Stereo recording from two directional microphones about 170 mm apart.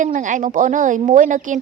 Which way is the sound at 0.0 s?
50° right (ahead or behind).